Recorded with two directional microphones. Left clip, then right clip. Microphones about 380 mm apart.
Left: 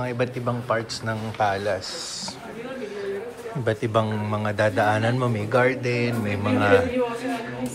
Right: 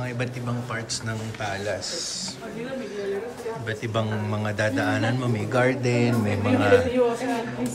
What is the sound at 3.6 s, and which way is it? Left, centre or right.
A man's voice, centre.